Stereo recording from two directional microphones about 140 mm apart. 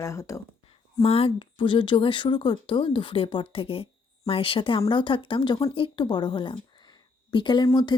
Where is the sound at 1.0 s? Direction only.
45° left (ahead or behind).